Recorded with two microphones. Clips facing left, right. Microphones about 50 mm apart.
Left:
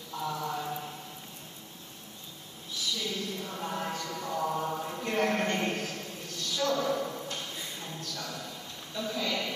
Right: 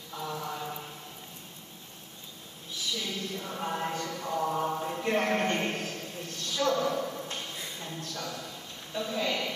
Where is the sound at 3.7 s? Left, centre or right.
Right.